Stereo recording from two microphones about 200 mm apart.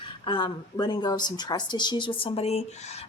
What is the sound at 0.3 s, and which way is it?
Speech, 25° left (ahead or behind).